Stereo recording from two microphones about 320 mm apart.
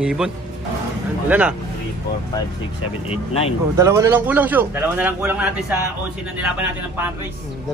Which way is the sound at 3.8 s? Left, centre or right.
Centre.